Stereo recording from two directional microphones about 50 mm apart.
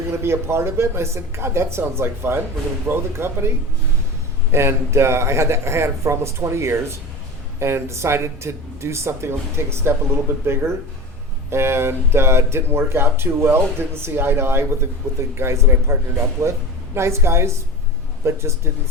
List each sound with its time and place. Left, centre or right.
0.2 s speech: right
4.5 s speech: right
15.1 s speech: right